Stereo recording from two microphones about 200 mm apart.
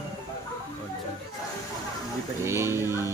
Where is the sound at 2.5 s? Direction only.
15° right (ahead or behind).